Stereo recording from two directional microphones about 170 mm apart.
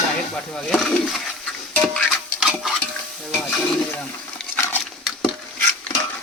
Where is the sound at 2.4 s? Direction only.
5° right (ahead or behind).